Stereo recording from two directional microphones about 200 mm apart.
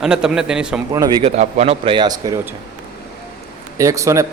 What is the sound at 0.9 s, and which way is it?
Speech, 20° right (ahead or behind).